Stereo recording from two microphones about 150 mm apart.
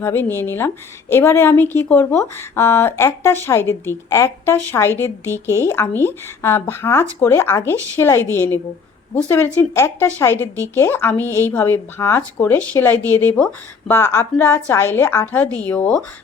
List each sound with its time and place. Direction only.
0.0 s a woman's voice: 15° left (ahead or behind)